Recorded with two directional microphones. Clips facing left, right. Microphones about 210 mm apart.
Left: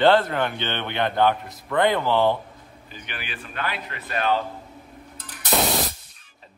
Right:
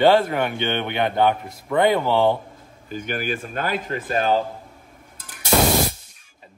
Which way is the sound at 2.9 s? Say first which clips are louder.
Right 12 dB; 45° right (ahead or behind).